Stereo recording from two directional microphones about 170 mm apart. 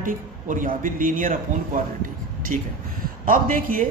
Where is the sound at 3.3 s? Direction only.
55° right (ahead or behind).